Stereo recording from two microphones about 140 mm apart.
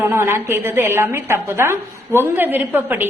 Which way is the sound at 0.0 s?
15° right (ahead or behind).